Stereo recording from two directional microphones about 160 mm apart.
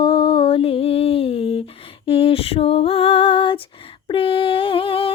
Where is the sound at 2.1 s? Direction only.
35° left (ahead or behind).